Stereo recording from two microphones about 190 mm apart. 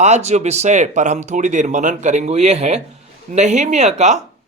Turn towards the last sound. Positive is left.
turn(degrees=-35)  # may be behind; listen again after turning